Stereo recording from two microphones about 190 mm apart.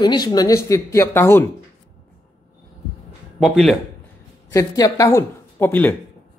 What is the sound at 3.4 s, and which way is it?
Speech, centre (ahead or behind).